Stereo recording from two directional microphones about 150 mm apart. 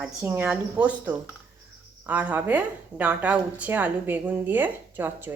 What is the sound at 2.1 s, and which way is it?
Speech, 10° right (ahead or behind).